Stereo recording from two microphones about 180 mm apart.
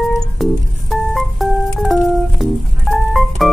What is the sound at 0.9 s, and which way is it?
Organ, centre (ahead or behind).